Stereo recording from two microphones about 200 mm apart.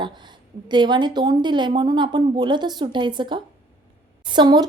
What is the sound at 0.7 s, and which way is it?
A woman's voice, 20° right (ahead or behind).